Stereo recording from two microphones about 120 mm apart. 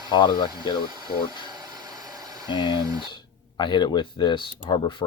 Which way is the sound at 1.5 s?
35° right (ahead or behind).